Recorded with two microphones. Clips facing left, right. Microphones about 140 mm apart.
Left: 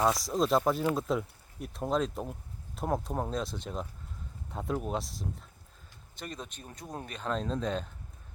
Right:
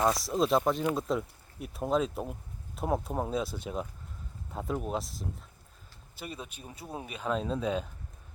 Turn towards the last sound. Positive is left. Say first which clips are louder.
# right 1 dB
turn(degrees=-5)  # may be behind; listen again after turning